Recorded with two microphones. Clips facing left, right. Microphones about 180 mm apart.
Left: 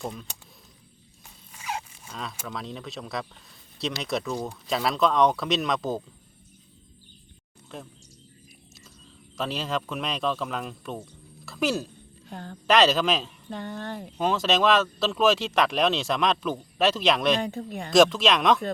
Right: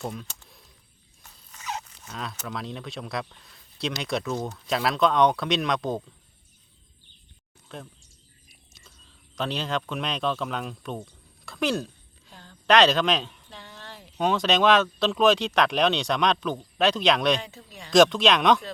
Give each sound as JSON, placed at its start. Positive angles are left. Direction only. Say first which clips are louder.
{"t": 0.0, "sound": "speech", "louder": "right 1 dB", "side_deg": 0}
{"t": 1.2, "sound": "zipper", "louder": "right 1 dB", "side_deg": 10}
{"t": 2.3, "sound": "speech", "louder": "right 1 dB", "side_deg": 10}
{"t": 4.3, "sound": "speech", "louder": "right 1 dB", "side_deg": 10}
{"t": 4.6, "sound": "speech", "louder": "right 1 dB", "side_deg": 0}
{"t": 7.7, "sound": "speech", "louder": "even", "side_deg": 0}
{"t": 9.4, "sound": "speech", "louder": "right 1 dB", "side_deg": 0}
{"t": 11.4, "sound": "a sound", "louder": "even", "side_deg": 5}
{"t": 12.3, "sound": "a sound", "louder": "left 12 dB", "side_deg": 55}
{"t": 12.6, "sound": "speech", "louder": "right 1 dB", "side_deg": 5}
{"t": 13.5, "sound": "speech", "louder": "left 11 dB", "side_deg": 50}
{"t": 14.2, "sound": "speech", "louder": "right 1 dB", "side_deg": 0}
{"t": 17.4, "sound": "speech", "louder": "left 11 dB", "side_deg": 50}
{"t": 17.9, "sound": "speech", "louder": "right 1 dB", "side_deg": 0}